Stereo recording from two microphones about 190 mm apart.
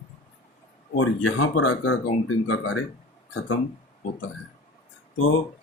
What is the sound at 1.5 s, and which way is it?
Speech, 90° left.